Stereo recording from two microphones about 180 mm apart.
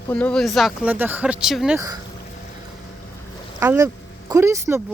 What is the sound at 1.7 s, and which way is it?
Speech, 20° right (ahead or behind).